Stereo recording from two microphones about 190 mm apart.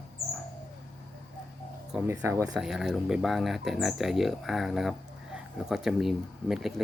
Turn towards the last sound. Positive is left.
turn(degrees=0)  # may be behind; listen again after turning